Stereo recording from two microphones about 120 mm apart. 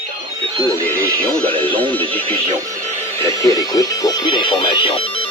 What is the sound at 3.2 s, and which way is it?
Speech, 25° left (ahead or behind).